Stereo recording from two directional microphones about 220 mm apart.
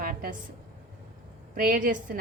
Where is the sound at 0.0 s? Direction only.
40° right (ahead or behind).